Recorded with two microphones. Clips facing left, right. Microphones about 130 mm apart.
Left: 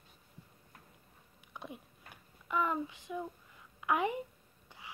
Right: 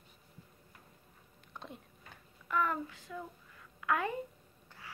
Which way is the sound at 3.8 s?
20° left (ahead or behind).